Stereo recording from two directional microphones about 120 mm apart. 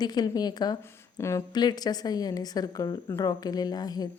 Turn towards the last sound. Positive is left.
turn(degrees=35)  # may be behind; listen again after turning